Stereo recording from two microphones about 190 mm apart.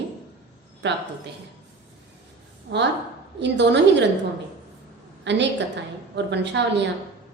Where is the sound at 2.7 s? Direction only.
70° right (ahead or behind).